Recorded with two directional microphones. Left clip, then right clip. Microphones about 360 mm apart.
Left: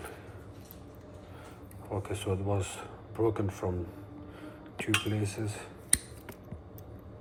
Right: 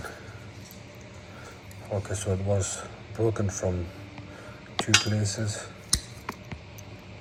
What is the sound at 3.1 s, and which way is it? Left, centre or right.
Speech, centre.